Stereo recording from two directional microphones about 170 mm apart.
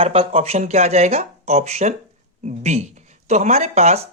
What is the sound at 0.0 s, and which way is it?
Speech, 35° right (ahead or behind).